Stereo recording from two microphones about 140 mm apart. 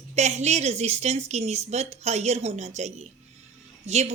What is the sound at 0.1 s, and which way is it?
Speech, 55° right (ahead or behind).